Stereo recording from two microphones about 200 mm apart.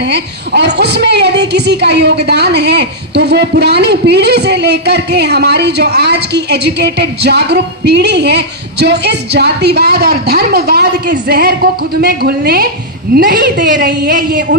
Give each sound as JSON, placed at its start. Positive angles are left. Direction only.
{"t": 0.0, "sound": "a woman's voice", "side_deg": -55}